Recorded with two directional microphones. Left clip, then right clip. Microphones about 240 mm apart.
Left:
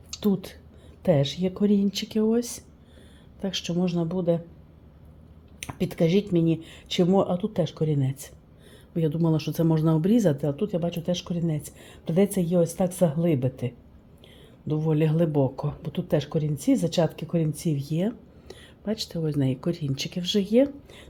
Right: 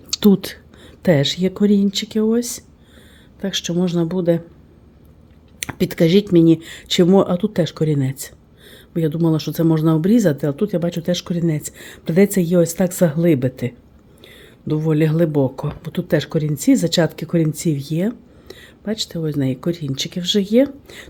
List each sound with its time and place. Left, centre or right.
0.1 s speech: right
1.0 s speech: right
5.5 s speech: right